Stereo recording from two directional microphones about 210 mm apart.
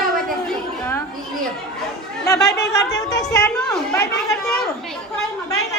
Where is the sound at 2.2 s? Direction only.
15° left (ahead or behind).